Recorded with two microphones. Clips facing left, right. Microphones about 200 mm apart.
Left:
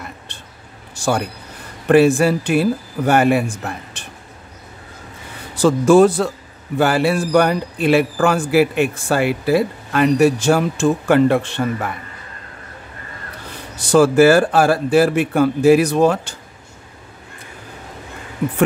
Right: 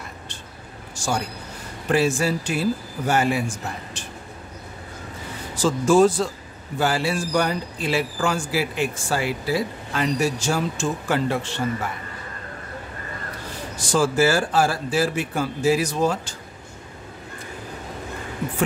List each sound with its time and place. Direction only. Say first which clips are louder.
0.3 s a sound: right 1 dB; 60° left (ahead or behind)
1.9 s a man's voice: left 8 dB; 60° left (ahead or behind)
5.6 s a man's voice: left 6 dB; 60° left (ahead or behind)
13.7 s a man's voice: left 8 dB; 60° left (ahead or behind)